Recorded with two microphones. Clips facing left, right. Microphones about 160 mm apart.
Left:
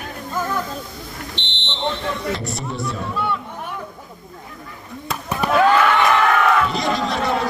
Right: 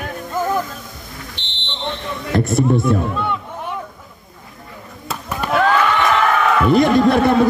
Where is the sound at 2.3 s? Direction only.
50° right (ahead or behind).